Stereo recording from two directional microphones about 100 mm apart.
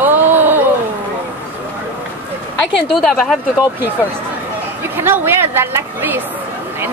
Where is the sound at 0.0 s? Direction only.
20° right (ahead or behind).